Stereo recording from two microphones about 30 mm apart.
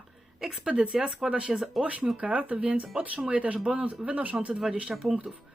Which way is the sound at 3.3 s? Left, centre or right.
Right.